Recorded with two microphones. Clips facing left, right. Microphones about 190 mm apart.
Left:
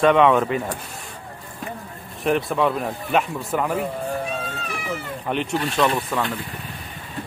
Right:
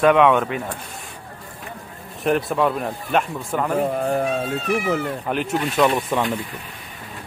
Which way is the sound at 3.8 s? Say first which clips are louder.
Right 5 dB; 60° right (ahead or behind).